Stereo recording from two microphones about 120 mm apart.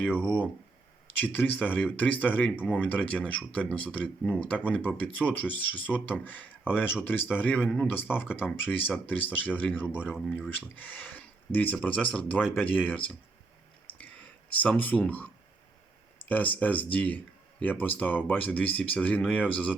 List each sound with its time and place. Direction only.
0.2 s speech: 10° left (ahead or behind)
10.0 s speech: 5° right (ahead or behind)
10.5 s speech: 15° left (ahead or behind)
14.6 s speech: 15° left (ahead or behind)
16.3 s speech: 10° left (ahead or behind)